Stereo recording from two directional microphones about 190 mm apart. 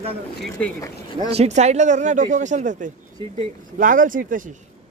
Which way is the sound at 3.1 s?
30° right (ahead or behind).